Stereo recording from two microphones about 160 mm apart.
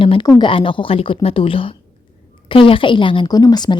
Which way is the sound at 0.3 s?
30° left (ahead or behind).